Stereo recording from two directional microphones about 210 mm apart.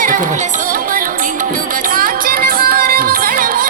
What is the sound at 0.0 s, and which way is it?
Music, 40° right (ahead or behind).